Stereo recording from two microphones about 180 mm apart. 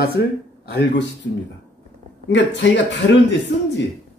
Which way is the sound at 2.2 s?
80° left.